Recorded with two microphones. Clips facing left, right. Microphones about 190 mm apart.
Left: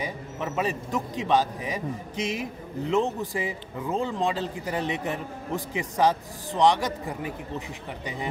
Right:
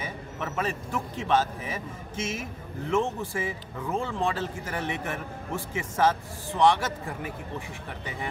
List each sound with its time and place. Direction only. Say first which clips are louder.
0.0 s a man's voice: left 3 dB; 15° left (ahead or behind)